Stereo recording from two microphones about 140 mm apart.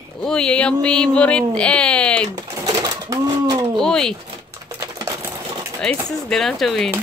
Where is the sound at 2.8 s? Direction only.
25° right (ahead or behind).